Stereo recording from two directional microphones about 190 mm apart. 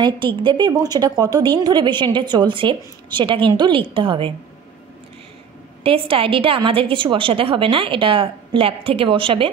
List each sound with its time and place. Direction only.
0.0 s a woman's voice: 25° right (ahead or behind)
5.9 s a woman's voice: 30° right (ahead or behind)